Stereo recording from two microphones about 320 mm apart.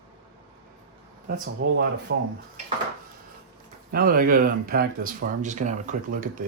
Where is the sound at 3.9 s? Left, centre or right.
Right.